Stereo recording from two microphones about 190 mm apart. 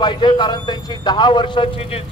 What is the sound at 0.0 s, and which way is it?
A man's voice, 25° left (ahead or behind).